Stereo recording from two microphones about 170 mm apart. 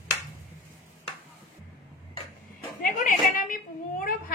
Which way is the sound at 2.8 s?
50° left (ahead or behind).